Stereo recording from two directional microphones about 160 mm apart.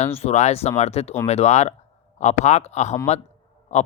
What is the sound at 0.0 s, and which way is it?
Speech, 40° left (ahead or behind).